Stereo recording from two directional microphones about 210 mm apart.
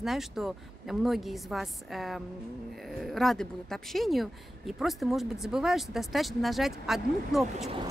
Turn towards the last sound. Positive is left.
turn(degrees=-25)  # may be behind; listen again after turning